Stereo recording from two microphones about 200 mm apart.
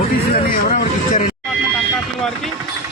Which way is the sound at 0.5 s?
40° left (ahead or behind).